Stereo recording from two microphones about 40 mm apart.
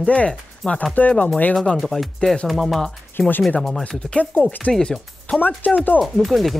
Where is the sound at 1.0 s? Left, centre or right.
Left.